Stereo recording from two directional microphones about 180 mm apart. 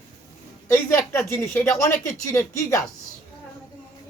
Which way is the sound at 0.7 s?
15° left (ahead or behind).